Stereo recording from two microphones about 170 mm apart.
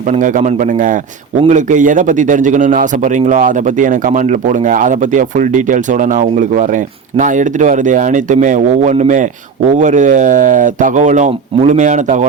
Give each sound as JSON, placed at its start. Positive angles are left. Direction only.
{"t": 0.1, "sound": "a man's voice", "side_deg": -45}